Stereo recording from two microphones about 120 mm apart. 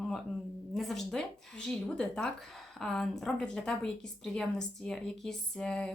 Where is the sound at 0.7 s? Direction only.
Centre (ahead or behind).